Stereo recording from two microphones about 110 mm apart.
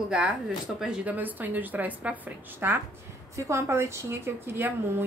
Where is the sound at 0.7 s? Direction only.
5° right (ahead or behind).